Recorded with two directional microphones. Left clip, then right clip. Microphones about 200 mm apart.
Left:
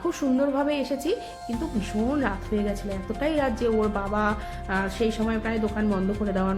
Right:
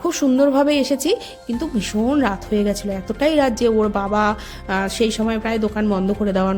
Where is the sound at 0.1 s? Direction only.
50° right (ahead or behind).